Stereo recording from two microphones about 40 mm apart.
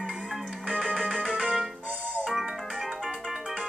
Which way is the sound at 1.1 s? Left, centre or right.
Right.